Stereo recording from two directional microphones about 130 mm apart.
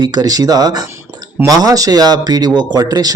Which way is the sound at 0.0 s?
30° right (ahead or behind).